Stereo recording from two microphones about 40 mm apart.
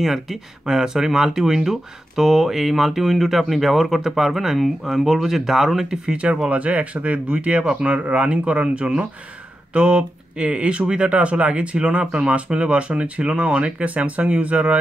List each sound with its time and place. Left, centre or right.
0.0 s speech: centre
5.9 s speech: right